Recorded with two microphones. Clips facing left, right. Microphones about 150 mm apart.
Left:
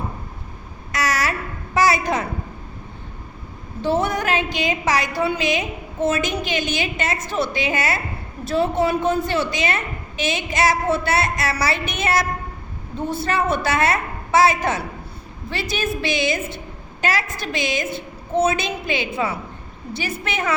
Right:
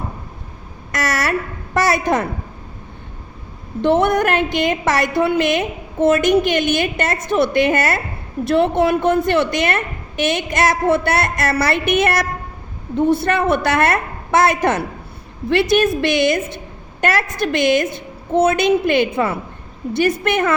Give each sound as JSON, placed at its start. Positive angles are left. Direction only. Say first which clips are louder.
{"t": 0.9, "sound": "a sound", "louder": "right 3 dB", "side_deg": -50}
{"t": 3.8, "sound": "a woman's voice", "louder": "right 6 dB", "side_deg": -65}
{"t": 8.4, "sound": "a woman's voice", "louder": "right 4 dB", "side_deg": -65}
{"t": 13.2, "sound": "a woman's voice", "louder": "right 4 dB", "side_deg": -60}